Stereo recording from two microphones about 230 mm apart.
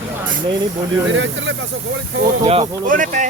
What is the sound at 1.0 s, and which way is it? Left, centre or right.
Speech, right.